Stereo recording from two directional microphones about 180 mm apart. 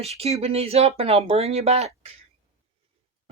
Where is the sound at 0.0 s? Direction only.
35° right (ahead or behind).